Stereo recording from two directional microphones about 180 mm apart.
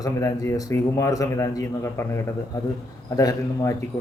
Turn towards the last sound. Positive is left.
turn(degrees=20)  # may be behind; listen again after turning